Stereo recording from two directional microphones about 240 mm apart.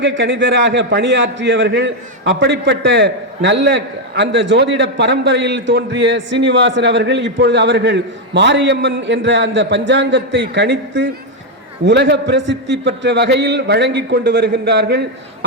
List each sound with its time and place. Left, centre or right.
0.0 s a man's voice: right